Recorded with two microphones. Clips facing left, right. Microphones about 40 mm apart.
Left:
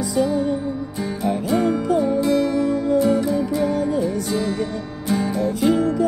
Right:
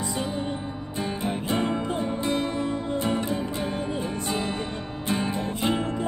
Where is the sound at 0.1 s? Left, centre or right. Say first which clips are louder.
Left 9 dB; right.